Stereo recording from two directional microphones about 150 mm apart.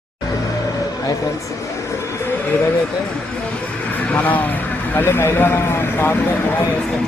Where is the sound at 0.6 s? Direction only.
20° left (ahead or behind).